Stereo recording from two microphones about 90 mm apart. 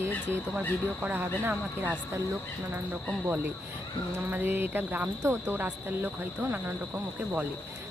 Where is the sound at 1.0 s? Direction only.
20° right (ahead or behind).